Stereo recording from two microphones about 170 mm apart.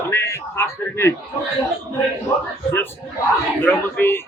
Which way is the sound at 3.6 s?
15° left (ahead or behind).